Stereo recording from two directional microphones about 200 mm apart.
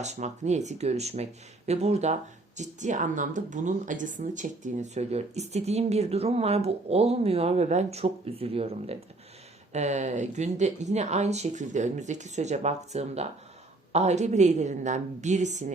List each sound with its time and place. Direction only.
0.0 s a woman's voice: 35° right (ahead or behind)